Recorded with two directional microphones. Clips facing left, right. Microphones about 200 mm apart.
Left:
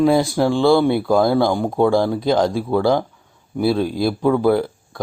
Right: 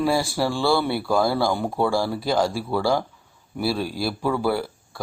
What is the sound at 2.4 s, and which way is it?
Speech, 20° left (ahead or behind).